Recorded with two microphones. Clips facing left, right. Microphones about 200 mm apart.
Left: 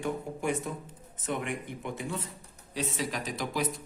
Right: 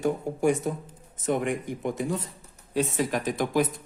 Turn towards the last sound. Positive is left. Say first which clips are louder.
# right 7 dB
turn(degrees=-50)  # may be behind; listen again after turning